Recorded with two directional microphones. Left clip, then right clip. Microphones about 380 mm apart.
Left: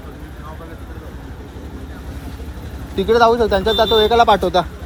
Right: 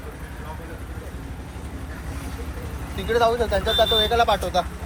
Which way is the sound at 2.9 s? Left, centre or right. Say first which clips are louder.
Left 7 dB; left.